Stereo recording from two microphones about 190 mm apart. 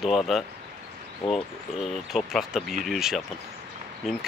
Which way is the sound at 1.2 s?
30° left (ahead or behind).